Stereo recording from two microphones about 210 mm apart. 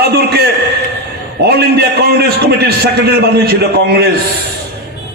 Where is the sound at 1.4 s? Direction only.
50° right (ahead or behind).